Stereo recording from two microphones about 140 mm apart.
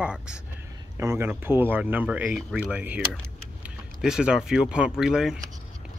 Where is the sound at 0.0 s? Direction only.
5° right (ahead or behind).